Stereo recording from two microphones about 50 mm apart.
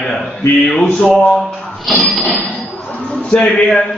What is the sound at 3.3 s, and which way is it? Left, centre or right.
Speech, centre.